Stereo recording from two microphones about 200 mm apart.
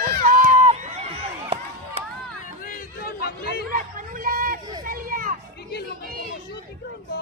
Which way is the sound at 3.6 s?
40° right (ahead or behind).